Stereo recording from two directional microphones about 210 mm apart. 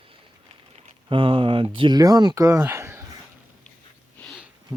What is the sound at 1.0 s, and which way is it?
Speech, 25° right (ahead or behind).